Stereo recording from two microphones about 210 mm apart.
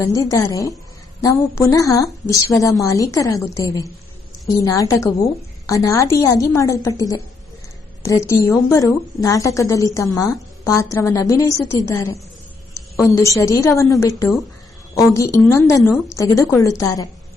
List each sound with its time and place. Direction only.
0.0 s a woman's voice: 15° left (ahead or behind)